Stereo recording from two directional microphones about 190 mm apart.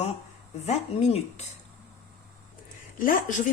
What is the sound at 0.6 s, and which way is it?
Speech, 35° left (ahead or behind).